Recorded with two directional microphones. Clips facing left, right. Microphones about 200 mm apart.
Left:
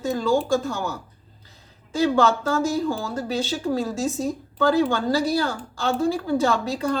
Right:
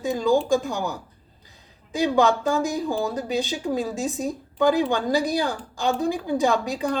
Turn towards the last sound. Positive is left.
turn(degrees=-15)  # may be behind; listen again after turning